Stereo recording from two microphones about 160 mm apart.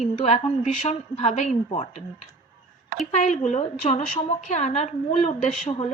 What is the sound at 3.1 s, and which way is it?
A woman's voice, 50° left (ahead or behind).